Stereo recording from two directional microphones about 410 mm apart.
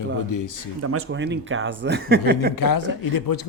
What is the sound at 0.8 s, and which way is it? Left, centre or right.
Speech, right.